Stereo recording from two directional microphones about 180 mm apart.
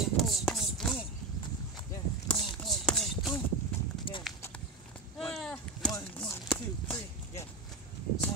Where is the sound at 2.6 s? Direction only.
Centre (ahead or behind).